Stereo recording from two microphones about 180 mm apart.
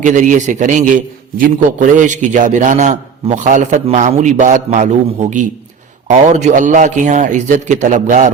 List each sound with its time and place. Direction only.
0.0 s a man's voice: 45° right (ahead or behind)